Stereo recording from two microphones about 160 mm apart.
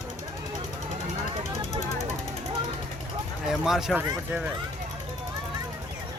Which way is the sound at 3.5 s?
Centre (ahead or behind).